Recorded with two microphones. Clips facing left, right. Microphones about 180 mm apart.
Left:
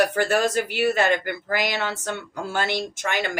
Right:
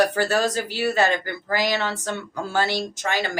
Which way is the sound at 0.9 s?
55° left (ahead or behind).